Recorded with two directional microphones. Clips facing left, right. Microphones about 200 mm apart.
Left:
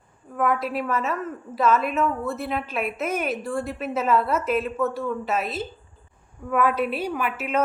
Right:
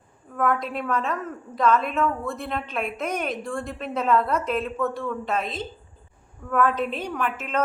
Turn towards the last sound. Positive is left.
turn(degrees=10)  # may be behind; listen again after turning